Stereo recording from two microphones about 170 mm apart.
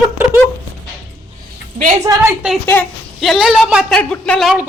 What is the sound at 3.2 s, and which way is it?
Speech, centre (ahead or behind).